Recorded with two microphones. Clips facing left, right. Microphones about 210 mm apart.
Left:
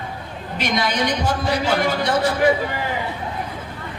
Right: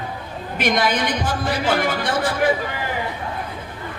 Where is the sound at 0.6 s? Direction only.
55° right (ahead or behind).